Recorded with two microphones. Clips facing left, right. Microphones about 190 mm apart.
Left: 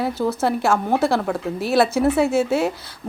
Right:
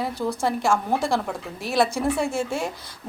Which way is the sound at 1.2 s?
60° left (ahead or behind).